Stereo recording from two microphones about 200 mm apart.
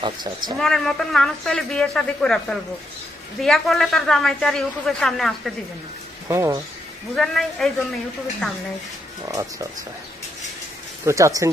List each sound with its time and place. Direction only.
0.0 s speech: 20° right (ahead or behind)
0.6 s speech: centre (ahead or behind)
6.2 s speech: 15° right (ahead or behind)
7.2 s speech: centre (ahead or behind)
9.3 s speech: 15° right (ahead or behind)
11.0 s speech: 15° right (ahead or behind)